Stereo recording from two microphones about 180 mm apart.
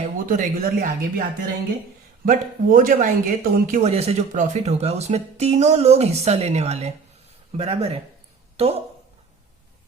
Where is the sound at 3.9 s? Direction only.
35° right (ahead or behind).